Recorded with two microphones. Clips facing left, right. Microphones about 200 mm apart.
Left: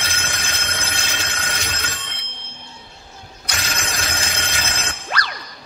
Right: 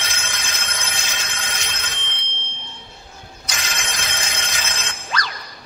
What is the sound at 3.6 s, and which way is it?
Telephone bell ringing, 35° left (ahead or behind).